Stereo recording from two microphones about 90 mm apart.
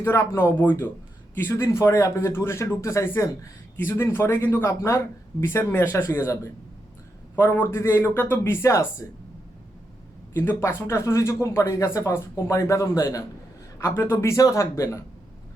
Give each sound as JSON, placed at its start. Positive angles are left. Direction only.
{"t": 0.0, "sound": "speech", "side_deg": 30}
{"t": 10.3, "sound": "speech", "side_deg": 20}